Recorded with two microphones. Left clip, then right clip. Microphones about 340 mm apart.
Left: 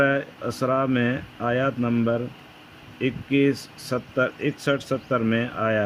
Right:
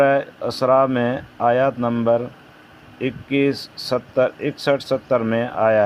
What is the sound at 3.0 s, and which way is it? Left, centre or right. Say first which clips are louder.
Speech: right 2 dB; right.